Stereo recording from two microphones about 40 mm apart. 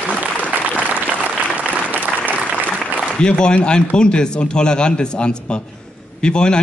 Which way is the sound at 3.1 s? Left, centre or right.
Left.